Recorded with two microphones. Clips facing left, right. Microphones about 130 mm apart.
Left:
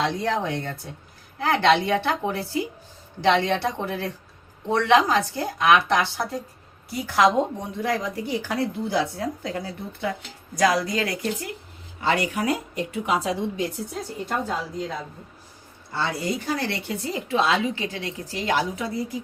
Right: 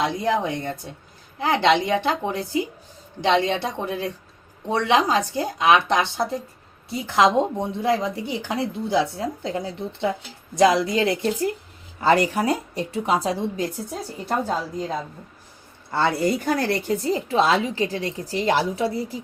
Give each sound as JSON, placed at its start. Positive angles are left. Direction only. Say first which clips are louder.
{"t": 0.0, "sound": "a woman's voice", "louder": "right 2 dB", "side_deg": -10}
{"t": 15.9, "sound": "a woman's voice", "louder": "right 6 dB", "side_deg": -55}